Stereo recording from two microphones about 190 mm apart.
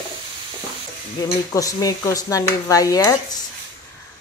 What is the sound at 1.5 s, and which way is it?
Speech, 20° left (ahead or behind).